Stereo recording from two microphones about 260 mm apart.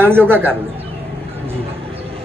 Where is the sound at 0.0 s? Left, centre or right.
Centre.